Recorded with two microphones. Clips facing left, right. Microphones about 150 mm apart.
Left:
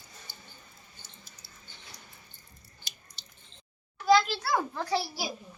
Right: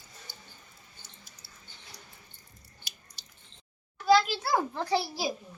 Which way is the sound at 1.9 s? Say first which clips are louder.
Right 1 dB; 70° right (ahead or behind).